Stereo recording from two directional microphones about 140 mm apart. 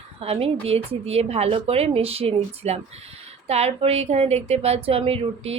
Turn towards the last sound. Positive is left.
turn(degrees=-45)  # may be behind; listen again after turning